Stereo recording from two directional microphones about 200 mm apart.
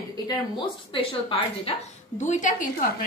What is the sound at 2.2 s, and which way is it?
Speech, 40° left (ahead or behind).